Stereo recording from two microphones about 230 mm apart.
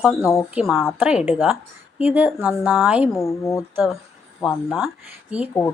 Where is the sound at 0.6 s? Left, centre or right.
Centre.